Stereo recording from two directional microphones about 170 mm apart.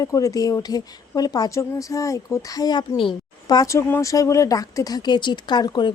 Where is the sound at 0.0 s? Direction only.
20° left (ahead or behind).